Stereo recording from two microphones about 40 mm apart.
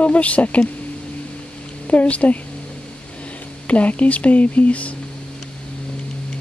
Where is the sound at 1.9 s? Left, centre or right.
Left.